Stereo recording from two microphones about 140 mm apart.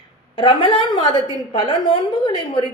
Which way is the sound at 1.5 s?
40° left (ahead or behind).